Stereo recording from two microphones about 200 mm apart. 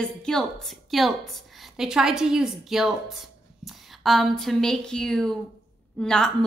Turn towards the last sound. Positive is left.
turn(degrees=5)  # may be behind; listen again after turning